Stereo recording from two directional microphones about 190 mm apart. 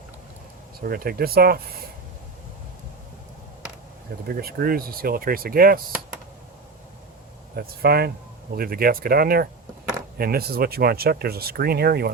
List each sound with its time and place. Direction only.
0.9 s speech: 50° right (ahead or behind)
4.3 s speech: 55° right (ahead or behind)
7.5 s speech: 55° right (ahead or behind)